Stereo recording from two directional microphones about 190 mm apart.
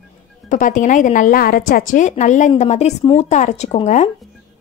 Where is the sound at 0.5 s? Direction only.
40° left (ahead or behind).